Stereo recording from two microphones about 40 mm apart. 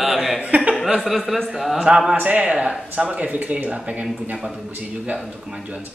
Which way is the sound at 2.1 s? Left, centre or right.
Right.